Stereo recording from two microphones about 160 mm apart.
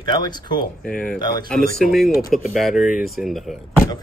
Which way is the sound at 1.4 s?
Centre (ahead or behind).